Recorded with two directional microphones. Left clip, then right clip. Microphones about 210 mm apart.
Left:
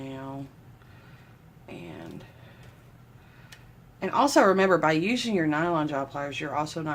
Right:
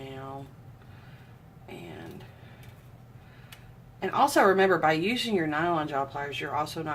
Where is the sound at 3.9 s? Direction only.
40° left (ahead or behind).